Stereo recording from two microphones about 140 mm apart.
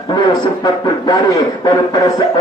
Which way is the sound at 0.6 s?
30° left (ahead or behind).